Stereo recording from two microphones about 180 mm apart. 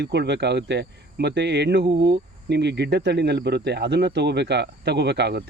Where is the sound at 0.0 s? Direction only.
70° right (ahead or behind).